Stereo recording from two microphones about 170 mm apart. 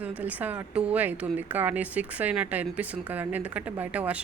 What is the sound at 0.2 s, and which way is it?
Speech, 10° right (ahead or behind).